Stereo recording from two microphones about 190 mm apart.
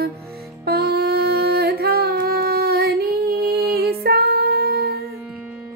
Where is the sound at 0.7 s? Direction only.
55° right (ahead or behind).